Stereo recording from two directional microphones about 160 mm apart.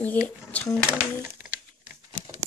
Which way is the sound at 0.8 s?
20° right (ahead or behind).